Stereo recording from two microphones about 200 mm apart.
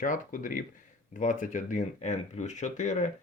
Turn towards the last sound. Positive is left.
turn(degrees=35)  # may be behind; listen again after turning